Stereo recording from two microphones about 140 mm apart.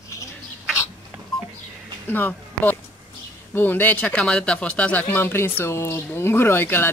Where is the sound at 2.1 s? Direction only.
15° left (ahead or behind).